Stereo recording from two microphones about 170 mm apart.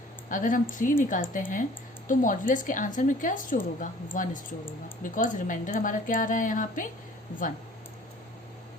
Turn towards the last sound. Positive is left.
turn(degrees=50)  # may be behind; listen again after turning